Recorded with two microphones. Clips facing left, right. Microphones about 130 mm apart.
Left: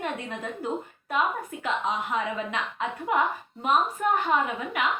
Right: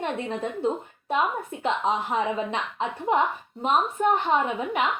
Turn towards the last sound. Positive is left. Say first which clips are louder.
# right 2 dB
turn(degrees=-25)  # may be behind; listen again after turning